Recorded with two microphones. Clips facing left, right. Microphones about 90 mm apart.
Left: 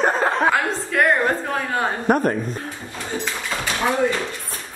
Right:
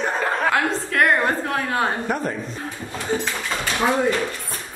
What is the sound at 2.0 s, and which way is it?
Speech, 50° left (ahead or behind).